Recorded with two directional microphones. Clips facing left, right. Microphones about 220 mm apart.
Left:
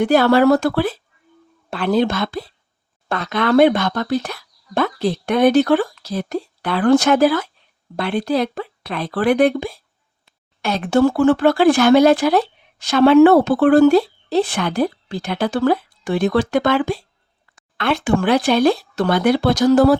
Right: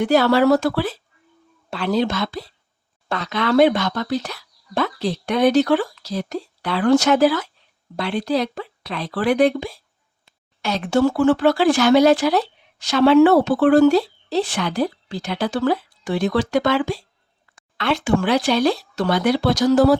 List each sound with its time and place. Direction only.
0.0 s speech: 55° left (ahead or behind)